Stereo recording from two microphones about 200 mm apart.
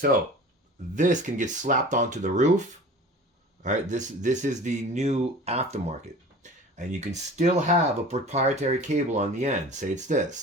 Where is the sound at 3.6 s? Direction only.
40° right (ahead or behind).